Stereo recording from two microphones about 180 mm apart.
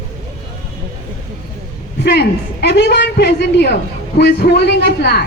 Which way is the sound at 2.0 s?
65° left (ahead or behind).